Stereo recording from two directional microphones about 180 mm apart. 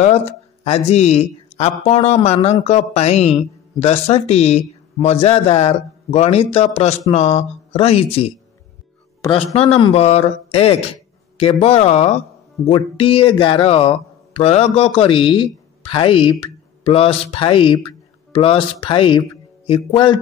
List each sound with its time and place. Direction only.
0.0 s speech: 35° left (ahead or behind)
9.7 s speech: 30° left (ahead or behind)